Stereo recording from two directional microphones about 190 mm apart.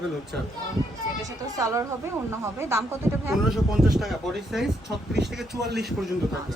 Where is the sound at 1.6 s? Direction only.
15° right (ahead or behind).